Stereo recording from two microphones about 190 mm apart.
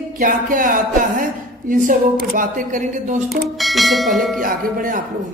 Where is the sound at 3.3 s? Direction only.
Centre (ahead or behind).